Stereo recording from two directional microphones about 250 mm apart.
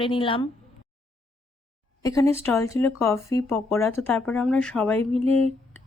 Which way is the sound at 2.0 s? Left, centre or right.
Centre.